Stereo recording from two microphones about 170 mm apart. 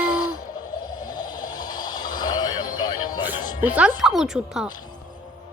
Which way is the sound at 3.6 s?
10° right (ahead or behind).